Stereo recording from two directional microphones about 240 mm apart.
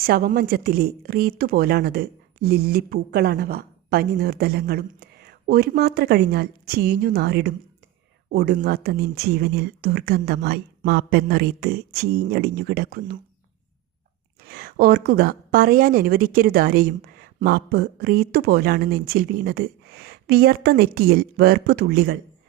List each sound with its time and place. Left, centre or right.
0.0 s a woman's voice: right
14.4 s a woman's voice: right